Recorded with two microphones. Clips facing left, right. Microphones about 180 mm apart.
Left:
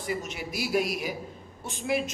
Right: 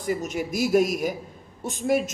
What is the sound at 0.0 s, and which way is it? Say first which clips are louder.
Speech: right 6 dB; 45° right (ahead or behind).